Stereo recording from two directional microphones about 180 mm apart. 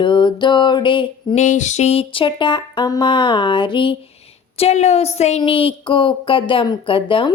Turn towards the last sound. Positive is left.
turn(degrees=30)  # may be behind; listen again after turning